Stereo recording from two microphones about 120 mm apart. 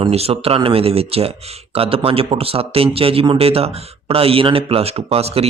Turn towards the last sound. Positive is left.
turn(degrees=-55)  # may be behind; listen again after turning